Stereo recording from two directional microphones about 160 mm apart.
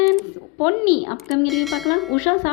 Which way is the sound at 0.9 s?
Centre (ahead or behind).